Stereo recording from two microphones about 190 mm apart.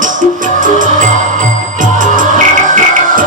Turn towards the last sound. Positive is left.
turn(degrees=-45)  # may be behind; listen again after turning